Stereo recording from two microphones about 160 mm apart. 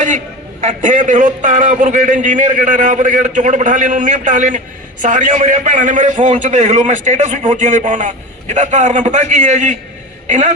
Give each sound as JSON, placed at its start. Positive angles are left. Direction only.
{"t": 0.6, "sound": "a man's voice", "side_deg": -50}